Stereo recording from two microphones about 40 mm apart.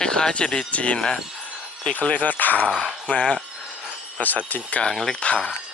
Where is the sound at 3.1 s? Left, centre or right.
Left.